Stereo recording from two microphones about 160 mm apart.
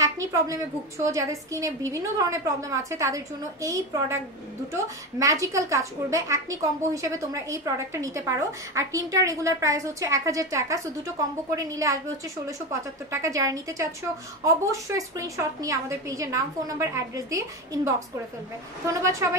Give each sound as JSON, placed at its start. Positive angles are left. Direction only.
{"t": 0.0, "sound": "a woman's voice", "side_deg": -20}
{"t": 13.1, "sound": "a woman's voice", "side_deg": -20}